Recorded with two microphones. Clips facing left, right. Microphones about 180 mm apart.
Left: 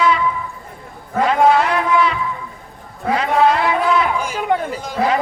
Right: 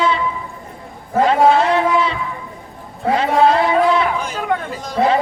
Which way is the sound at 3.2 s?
30° right (ahead or behind).